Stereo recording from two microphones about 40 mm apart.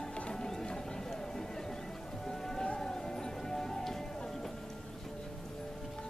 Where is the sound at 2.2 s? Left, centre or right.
Centre.